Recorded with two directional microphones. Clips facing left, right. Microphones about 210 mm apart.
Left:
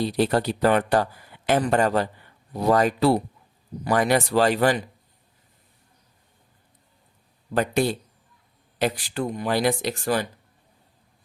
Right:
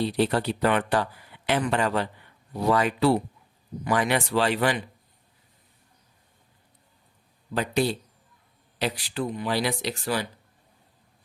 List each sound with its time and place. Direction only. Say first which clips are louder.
0.0 s speech: left 2 dB; 40° left (ahead or behind)
7.5 s speech: left 3 dB; 50° left (ahead or behind)